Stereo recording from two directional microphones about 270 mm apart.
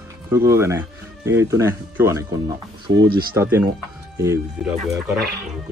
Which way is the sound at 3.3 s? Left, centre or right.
Centre.